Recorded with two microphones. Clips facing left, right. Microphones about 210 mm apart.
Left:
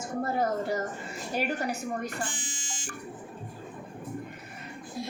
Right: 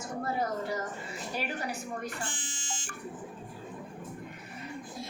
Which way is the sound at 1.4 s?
50° left (ahead or behind).